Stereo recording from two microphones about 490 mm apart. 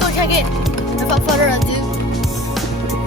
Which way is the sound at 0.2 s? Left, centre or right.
Left.